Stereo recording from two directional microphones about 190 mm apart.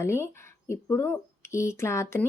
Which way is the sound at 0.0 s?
15° left (ahead or behind).